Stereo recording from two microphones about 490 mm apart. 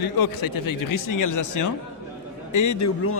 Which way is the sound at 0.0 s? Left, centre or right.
Left.